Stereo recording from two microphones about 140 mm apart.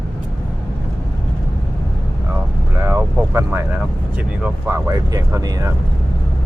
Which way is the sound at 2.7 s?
15° right (ahead or behind).